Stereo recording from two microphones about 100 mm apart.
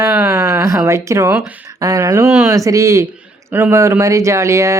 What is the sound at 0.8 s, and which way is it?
Speech, 30° right (ahead or behind).